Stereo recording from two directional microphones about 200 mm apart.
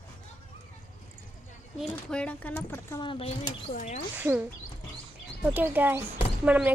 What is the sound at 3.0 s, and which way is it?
Speech, 25° left (ahead or behind).